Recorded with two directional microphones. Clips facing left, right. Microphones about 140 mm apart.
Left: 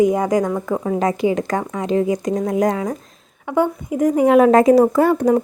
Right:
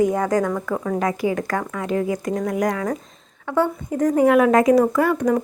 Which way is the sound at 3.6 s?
15° left (ahead or behind).